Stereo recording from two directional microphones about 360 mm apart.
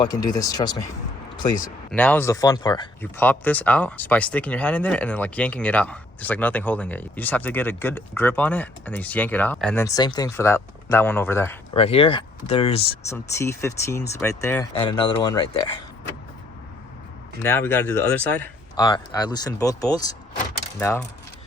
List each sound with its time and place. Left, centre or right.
0.0 s speech: centre
17.4 s speech: centre